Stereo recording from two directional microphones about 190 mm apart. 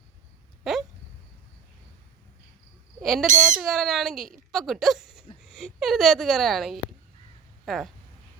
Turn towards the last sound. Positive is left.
turn(degrees=0)  # may be behind; listen again after turning